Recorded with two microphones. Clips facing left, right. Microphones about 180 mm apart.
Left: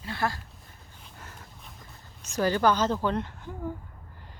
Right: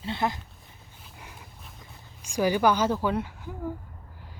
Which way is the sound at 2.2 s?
10° right (ahead or behind).